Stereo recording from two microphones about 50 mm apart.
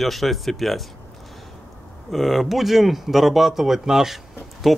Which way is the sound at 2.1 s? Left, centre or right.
Centre.